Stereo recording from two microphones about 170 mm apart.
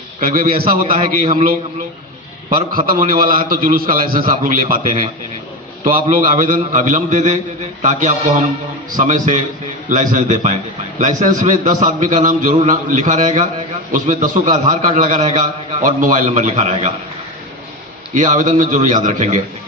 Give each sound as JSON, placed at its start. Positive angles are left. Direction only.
{"t": 0.2, "sound": "a man's voice", "side_deg": -55}
{"t": 0.9, "sound": "a man's voice", "side_deg": -40}
{"t": 2.5, "sound": "a man's voice", "side_deg": -55}
{"t": 18.1, "sound": "a man's voice", "side_deg": -45}